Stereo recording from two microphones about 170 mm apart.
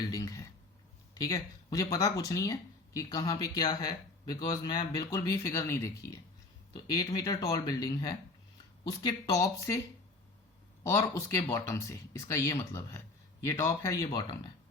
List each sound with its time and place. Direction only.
0.1 s a sound: 20° left (ahead or behind)
1.3 s speech: 20° left (ahead or behind)
7.2 s speech: 20° left (ahead or behind)
10.8 s speech: 20° left (ahead or behind)